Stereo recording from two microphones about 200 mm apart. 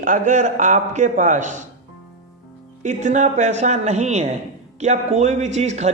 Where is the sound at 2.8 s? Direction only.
35° right (ahead or behind).